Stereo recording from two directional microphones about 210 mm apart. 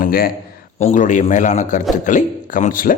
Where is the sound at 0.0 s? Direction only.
45° left (ahead or behind).